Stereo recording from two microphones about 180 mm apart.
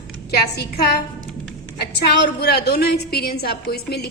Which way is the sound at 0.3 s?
65° left (ahead or behind).